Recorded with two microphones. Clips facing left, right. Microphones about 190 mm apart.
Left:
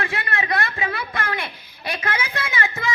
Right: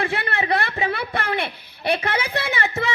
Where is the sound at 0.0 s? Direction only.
35° right (ahead or behind).